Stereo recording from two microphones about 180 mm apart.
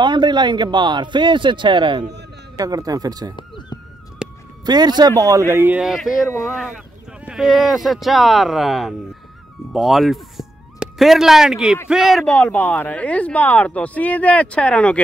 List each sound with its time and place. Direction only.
0.0 s a man's voice: 25° right (ahead or behind)
3.3 s a sound: 25° left (ahead or behind)
4.2 s music: 5° right (ahead or behind)
4.6 s a man's voice: 25° right (ahead or behind); by 15.0 s 5° left (ahead or behind)